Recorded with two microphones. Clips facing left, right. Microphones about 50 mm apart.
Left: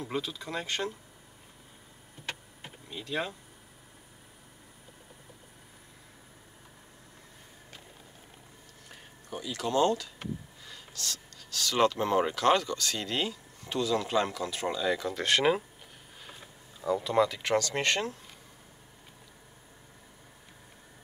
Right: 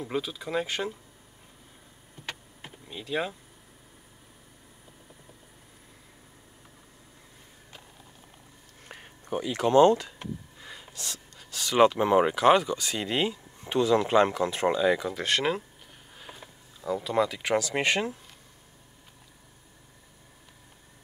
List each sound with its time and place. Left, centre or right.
0.0 s speech: centre
2.2 s vehicle: centre
8.8 s a sound: right
10.6 s speech: right
15.0 s speech: centre